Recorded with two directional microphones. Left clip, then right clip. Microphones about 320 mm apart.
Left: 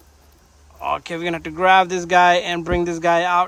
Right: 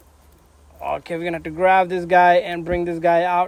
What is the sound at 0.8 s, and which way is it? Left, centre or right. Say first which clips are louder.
Speech: left 1 dB; centre.